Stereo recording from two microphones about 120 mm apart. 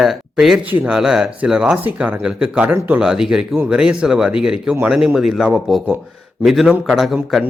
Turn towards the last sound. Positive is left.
turn(degrees=-5)  # may be behind; listen again after turning